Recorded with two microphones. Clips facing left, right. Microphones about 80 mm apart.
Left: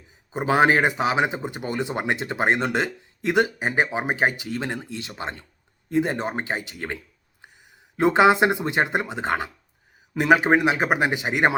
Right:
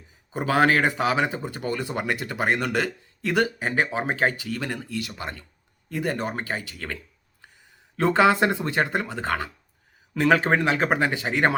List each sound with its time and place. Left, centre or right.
0.3 s speech: left